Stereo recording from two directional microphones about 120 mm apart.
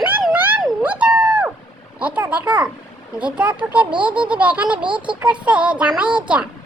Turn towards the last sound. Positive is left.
turn(degrees=-10)  # may be behind; listen again after turning